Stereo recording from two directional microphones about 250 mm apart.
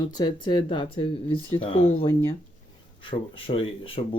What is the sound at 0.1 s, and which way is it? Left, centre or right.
Speech, centre.